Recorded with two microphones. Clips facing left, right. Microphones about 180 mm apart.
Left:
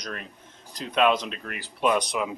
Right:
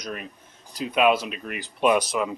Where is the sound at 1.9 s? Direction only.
Centre (ahead or behind).